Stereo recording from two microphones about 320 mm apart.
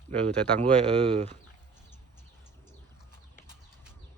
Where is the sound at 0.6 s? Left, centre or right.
Centre.